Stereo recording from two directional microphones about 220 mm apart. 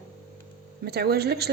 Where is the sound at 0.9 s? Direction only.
45° right (ahead or behind).